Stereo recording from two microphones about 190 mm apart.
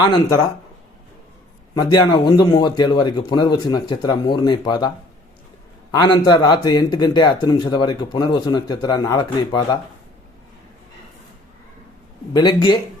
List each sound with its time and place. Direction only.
0.0 s speech: 25° left (ahead or behind)
1.7 s speech: 20° left (ahead or behind)
5.9 s speech: 20° left (ahead or behind)
12.3 s speech: 20° left (ahead or behind)